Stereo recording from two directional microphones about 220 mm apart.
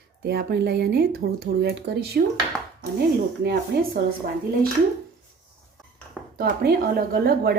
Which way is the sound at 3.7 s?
45° right (ahead or behind).